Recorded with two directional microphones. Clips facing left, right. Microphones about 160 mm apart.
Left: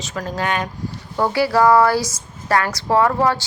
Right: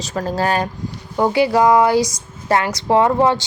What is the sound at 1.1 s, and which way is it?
A woman's voice, 20° right (ahead or behind).